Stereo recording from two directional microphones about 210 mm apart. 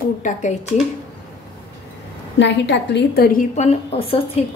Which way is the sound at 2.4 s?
55° left (ahead or behind).